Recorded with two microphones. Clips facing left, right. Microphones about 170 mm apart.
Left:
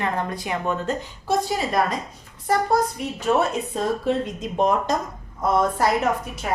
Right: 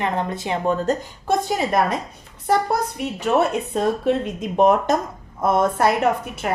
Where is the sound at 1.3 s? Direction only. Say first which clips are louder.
Right 2 dB; 55° right (ahead or behind).